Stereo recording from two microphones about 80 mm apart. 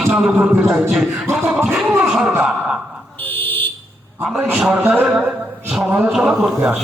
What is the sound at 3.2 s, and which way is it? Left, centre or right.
Buzzer, left.